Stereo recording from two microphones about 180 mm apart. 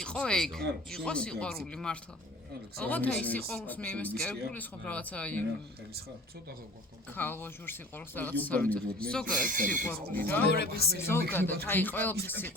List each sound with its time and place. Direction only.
0.0 s speech: 5° left (ahead or behind)
7.1 s speech: 10° left (ahead or behind)
9.2 s speech: 50° right (ahead or behind)
9.8 s speech: 10° left (ahead or behind)
10.5 s speech: 65° left (ahead or behind)
11.1 s speech: 10° left (ahead or behind)